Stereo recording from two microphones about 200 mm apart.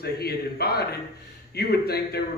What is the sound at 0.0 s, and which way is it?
A man's voice, 50° left (ahead or behind).